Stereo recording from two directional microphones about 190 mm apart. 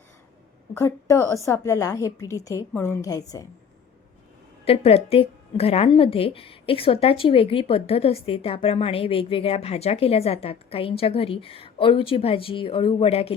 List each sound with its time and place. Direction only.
0.7 s a woman's voice: 15° left (ahead or behind)
4.6 s a woman's voice: 30° left (ahead or behind)